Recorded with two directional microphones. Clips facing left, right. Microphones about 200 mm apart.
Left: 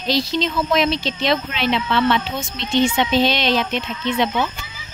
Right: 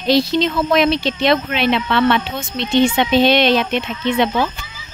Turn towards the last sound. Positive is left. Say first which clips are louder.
# right 3 dB
turn(degrees=-60)  # may be behind; listen again after turning